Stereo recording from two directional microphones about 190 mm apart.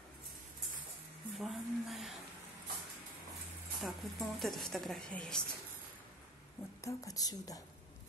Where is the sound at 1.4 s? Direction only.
Centre (ahead or behind).